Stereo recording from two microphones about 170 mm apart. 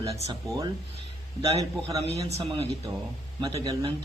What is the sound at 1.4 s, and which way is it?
A man's voice, 35° right (ahead or behind).